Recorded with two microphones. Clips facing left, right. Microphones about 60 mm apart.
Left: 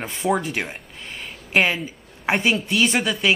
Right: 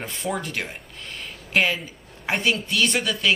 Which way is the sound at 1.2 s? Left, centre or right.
Centre.